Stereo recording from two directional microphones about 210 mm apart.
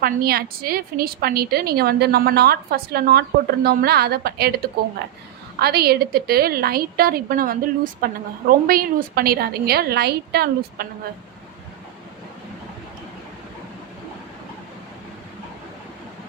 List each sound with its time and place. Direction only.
0.0 s a woman's voice: 45° right (ahead or behind)
5.5 s a woman's voice: 50° right (ahead or behind)